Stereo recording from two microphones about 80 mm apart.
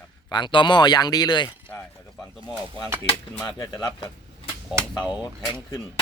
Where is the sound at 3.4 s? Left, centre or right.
Left.